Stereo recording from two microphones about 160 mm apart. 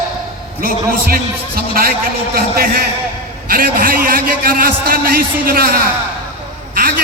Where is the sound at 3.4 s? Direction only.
70° right (ahead or behind).